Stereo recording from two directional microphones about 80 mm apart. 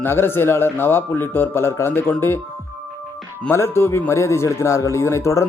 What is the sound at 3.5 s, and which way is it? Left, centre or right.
A man's voice, left.